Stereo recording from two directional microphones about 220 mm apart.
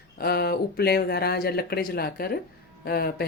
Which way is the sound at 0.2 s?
45° left (ahead or behind).